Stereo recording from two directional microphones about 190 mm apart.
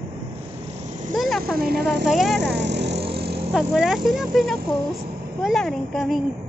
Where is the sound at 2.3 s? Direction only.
65° right (ahead or behind).